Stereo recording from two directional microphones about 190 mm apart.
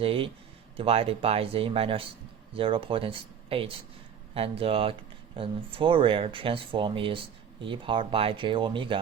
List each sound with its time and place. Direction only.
0.0 s speech: 30° right (ahead or behind)